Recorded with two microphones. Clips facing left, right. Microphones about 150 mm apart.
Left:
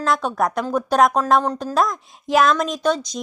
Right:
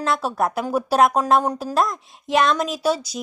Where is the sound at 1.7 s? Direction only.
Centre (ahead or behind).